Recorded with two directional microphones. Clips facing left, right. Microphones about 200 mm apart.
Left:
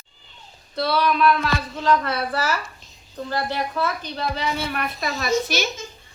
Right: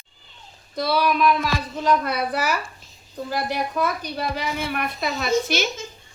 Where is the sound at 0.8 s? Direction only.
10° right (ahead or behind).